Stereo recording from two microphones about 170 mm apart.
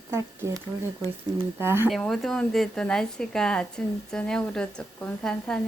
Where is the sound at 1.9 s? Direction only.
Centre (ahead or behind).